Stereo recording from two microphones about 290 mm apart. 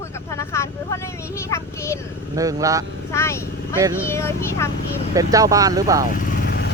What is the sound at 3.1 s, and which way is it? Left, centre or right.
Speech, centre.